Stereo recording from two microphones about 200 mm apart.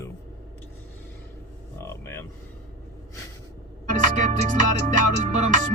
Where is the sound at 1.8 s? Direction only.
10° left (ahead or behind).